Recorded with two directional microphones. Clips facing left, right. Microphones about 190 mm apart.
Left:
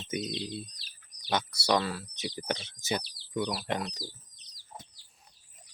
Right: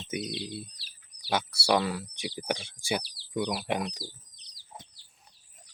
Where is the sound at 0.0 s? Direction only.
10° right (ahead or behind).